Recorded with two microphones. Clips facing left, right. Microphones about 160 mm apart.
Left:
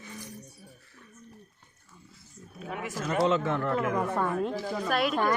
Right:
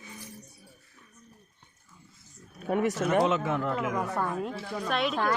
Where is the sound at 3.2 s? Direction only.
10° right (ahead or behind).